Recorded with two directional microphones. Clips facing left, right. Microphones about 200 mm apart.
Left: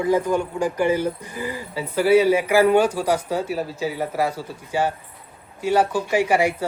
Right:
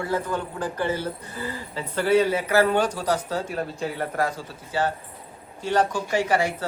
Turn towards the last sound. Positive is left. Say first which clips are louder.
# left 4 dB
turn(degrees=10)  # may be behind; listen again after turning